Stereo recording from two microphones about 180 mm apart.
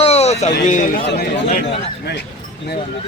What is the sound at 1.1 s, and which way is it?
Speech, 60° left (ahead or behind).